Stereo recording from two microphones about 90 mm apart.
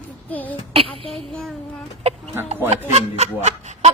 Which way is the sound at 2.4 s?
20° right (ahead or behind).